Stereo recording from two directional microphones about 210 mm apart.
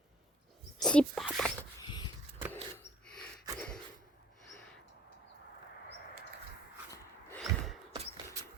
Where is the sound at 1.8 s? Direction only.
20° left (ahead or behind).